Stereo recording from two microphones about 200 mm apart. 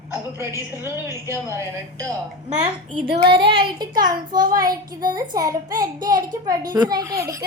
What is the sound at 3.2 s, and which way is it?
A child's voice, 25° right (ahead or behind).